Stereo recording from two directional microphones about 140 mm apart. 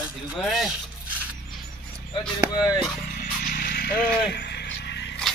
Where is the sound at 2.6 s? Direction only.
30° left (ahead or behind).